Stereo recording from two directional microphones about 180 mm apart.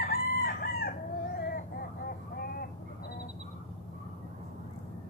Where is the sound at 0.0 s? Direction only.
55° left (ahead or behind).